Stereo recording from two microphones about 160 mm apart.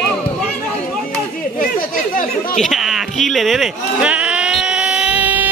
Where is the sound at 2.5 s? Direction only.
Centre (ahead or behind).